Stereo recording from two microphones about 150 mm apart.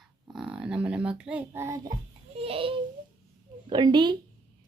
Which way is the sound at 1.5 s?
20° right (ahead or behind).